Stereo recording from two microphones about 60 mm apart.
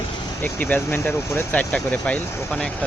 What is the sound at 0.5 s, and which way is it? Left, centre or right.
Speech, left.